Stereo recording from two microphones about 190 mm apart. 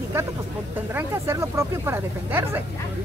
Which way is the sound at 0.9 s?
15° right (ahead or behind).